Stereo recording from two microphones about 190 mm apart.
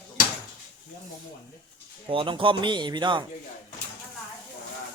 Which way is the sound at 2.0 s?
25° right (ahead or behind).